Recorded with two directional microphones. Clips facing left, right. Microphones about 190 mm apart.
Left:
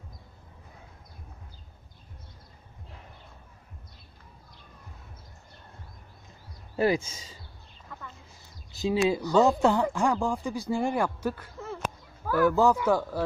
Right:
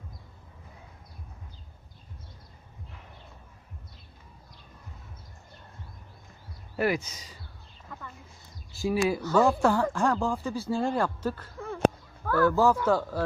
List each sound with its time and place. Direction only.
6.8 s speech: 25° left (ahead or behind)
7.9 s a sound: centre (ahead or behind)
8.7 s speech: 20° left (ahead or behind); by 11.8 s 5° left (ahead or behind)
12.3 s speech: 15° left (ahead or behind)